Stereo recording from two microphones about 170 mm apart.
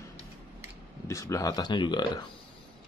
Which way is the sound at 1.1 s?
20° left (ahead or behind).